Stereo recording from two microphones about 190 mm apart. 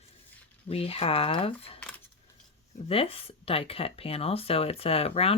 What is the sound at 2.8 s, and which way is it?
Speech, 30° left (ahead or behind).